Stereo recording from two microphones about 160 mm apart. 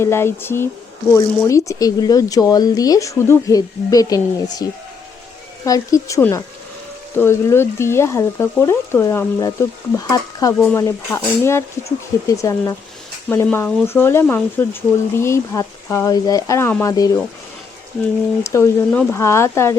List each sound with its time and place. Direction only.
0.0 s speech: 15° left (ahead or behind)
18.4 s speech: 15° left (ahead or behind)